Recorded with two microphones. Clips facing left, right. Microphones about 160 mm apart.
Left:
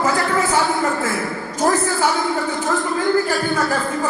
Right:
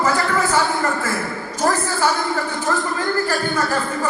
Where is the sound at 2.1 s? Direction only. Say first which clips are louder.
Left 1 dB; centre (ahead or behind).